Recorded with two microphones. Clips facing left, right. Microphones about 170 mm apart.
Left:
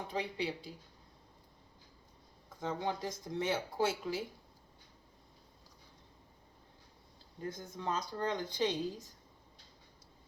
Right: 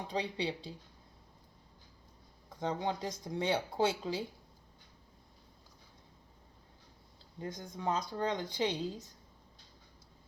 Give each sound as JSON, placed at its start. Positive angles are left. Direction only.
{"t": 0.1, "sound": "speech", "side_deg": -20}
{"t": 2.6, "sound": "speech", "side_deg": -20}
{"t": 7.3, "sound": "speech", "side_deg": -20}